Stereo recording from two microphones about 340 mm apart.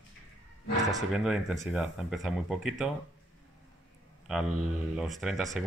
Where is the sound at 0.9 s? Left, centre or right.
Centre.